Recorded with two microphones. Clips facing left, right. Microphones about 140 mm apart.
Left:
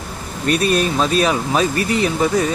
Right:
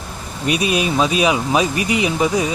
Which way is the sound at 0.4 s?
10° right (ahead or behind).